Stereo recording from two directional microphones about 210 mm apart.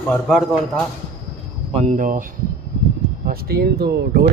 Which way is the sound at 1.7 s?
35° right (ahead or behind).